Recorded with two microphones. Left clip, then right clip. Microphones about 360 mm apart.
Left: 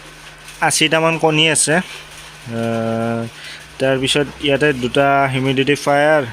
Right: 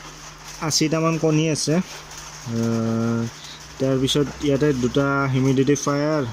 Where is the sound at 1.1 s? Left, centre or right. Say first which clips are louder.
Left 7 dB; left.